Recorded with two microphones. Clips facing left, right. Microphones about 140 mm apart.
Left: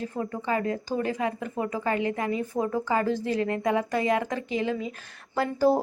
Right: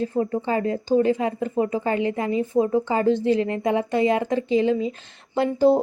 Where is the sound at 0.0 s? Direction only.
30° right (ahead or behind).